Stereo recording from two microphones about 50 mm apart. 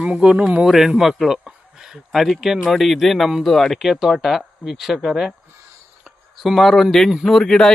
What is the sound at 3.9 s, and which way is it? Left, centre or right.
Speech, centre.